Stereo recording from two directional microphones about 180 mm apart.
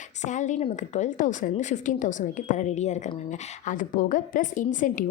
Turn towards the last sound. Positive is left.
turn(degrees=45)  # may be behind; listen again after turning